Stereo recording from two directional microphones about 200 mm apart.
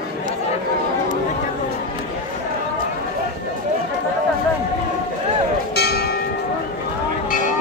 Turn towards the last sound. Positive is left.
turn(degrees=50)  # may be behind; listen again after turning